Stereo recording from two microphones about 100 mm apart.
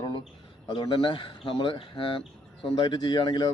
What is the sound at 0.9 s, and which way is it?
A man's voice, 60° left (ahead or behind).